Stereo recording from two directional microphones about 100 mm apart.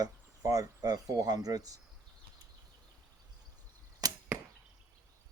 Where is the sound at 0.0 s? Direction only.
35° right (ahead or behind).